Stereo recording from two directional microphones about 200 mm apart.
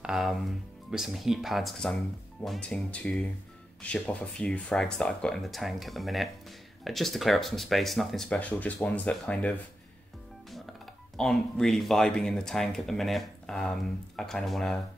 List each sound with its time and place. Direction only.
0.0 s speech: centre (ahead or behind)
11.1 s speech: 5° left (ahead or behind)